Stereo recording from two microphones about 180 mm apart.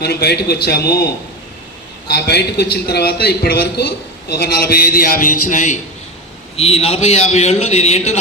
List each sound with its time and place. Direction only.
0.0 s a man's voice: 60° left (ahead or behind)
2.1 s a man's voice: 65° left (ahead or behind); by 5.7 s 45° left (ahead or behind)
6.6 s a man's voice: 35° left (ahead or behind)